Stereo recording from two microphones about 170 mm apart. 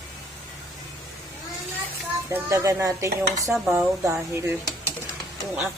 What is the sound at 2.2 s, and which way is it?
Speech, 15° right (ahead or behind).